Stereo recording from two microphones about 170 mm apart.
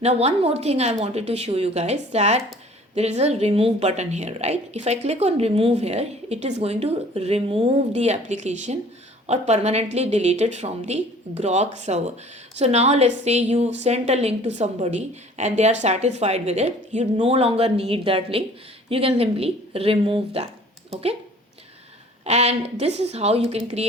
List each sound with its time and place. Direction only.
0.0 s a woman's voice: 40° right (ahead or behind)
22.2 s a woman's voice: 40° right (ahead or behind)